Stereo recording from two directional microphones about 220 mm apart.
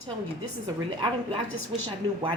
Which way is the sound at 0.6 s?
20° right (ahead or behind).